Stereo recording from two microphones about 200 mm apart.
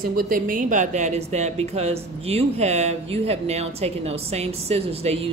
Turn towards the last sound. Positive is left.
turn(degrees=-30)  # may be behind; listen again after turning